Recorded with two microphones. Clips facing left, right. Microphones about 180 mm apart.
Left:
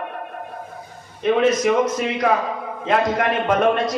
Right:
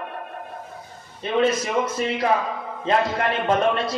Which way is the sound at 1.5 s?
30° right (ahead or behind).